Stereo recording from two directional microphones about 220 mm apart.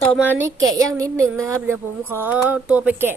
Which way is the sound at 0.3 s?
10° right (ahead or behind).